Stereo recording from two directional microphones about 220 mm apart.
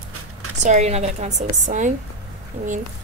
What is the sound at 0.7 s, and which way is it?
A woman's voice, 30° right (ahead or behind).